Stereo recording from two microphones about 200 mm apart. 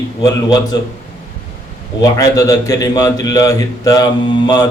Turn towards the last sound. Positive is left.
turn(degrees=20)  # may be behind; listen again after turning